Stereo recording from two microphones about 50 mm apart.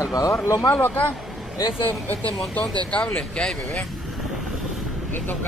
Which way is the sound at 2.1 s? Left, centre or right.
Left.